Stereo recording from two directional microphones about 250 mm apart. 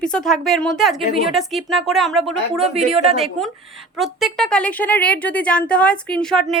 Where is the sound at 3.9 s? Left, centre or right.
Centre.